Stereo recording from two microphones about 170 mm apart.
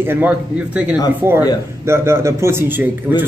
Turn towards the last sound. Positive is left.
turn(degrees=-10)  # may be behind; listen again after turning